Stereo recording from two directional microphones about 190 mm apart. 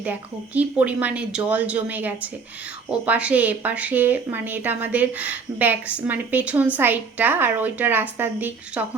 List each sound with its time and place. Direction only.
0.0 s speech: 10° right (ahead or behind)